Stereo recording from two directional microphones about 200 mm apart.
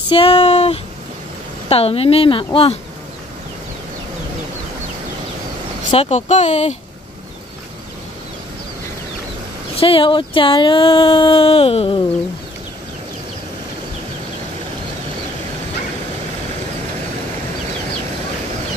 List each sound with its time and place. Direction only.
0.1 s speech: 30° left (ahead or behind)
5.9 s speech: 30° left (ahead or behind)
9.8 s speech: 25° left (ahead or behind)